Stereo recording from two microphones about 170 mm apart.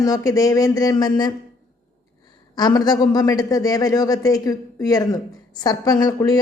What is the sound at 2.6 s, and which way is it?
A man's voice, 25° left (ahead or behind).